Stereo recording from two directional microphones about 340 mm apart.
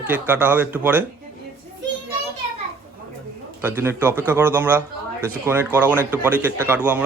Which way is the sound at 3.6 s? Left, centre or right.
Centre.